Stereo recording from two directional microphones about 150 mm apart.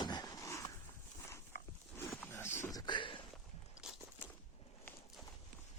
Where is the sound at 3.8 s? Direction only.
5° right (ahead or behind).